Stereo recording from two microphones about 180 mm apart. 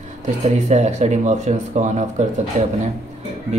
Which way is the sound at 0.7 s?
40° right (ahead or behind).